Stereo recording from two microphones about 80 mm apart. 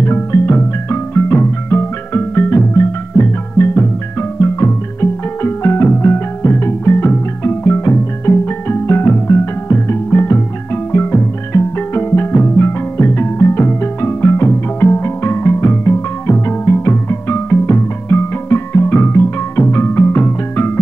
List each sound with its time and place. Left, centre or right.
0.0 s music: left